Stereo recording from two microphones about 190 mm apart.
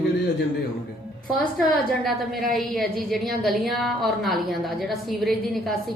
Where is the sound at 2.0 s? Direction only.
Centre (ahead or behind).